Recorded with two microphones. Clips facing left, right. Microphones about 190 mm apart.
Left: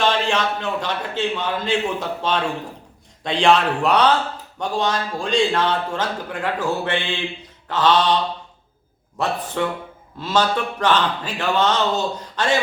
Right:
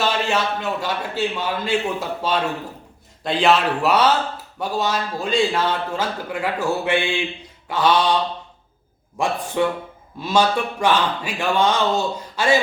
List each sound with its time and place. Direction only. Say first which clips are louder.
0.0 s a man's voice: left 1 dB; 5° right (ahead or behind)